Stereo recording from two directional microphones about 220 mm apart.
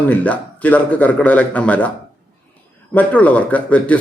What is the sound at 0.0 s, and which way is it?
Speech, 5° left (ahead or behind).